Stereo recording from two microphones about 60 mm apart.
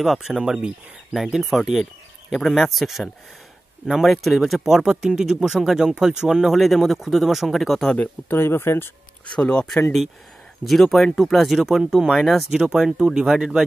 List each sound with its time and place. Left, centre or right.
0.0 s speech: centre
8.0 s speech: left
9.2 s speech: centre
10.6 s speech: centre
12.4 s speech: centre